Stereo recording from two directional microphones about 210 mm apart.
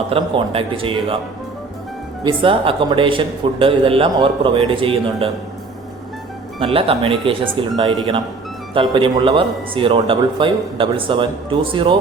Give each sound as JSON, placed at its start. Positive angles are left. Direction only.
{"t": 0.1, "sound": "speech", "side_deg": -25}
{"t": 2.2, "sound": "speech", "side_deg": -25}
{"t": 6.6, "sound": "speech", "side_deg": -25}